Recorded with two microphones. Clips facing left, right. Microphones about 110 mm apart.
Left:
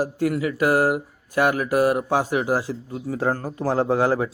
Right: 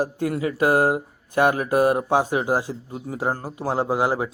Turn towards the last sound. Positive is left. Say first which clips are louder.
# left 2 dB
turn(degrees=-15)  # may be behind; listen again after turning